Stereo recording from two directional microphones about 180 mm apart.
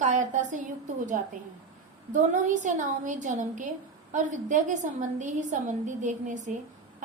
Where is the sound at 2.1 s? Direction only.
45° right (ahead or behind).